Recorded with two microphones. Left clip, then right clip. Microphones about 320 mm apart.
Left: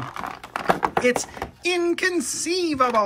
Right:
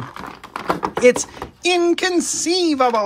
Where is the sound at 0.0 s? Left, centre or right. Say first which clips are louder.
Left 1 dB; centre.